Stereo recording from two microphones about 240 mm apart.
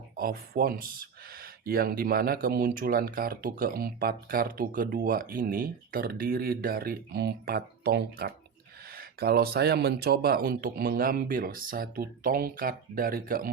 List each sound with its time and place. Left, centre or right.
0.2 s speech: right